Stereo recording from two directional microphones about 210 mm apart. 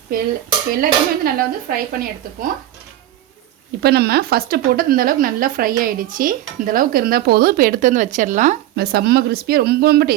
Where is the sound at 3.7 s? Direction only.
50° right (ahead or behind).